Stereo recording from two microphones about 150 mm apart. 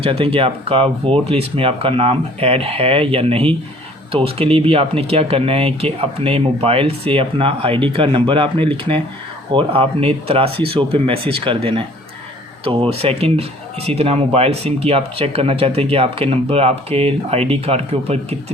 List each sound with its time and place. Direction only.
0.0 s speech: 35° right (ahead or behind)